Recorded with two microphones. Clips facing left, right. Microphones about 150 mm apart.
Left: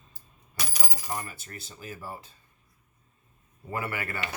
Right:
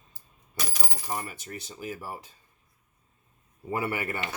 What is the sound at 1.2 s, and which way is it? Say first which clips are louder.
Speech: right 2 dB; 15° right (ahead or behind).